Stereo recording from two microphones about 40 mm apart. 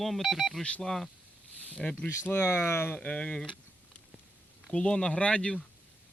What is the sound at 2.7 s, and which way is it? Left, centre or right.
Speech, left.